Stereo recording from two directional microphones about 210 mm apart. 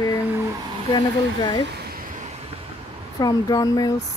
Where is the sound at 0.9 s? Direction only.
20° left (ahead or behind).